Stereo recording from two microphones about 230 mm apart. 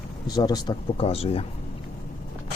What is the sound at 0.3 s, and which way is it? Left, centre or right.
Speech, centre.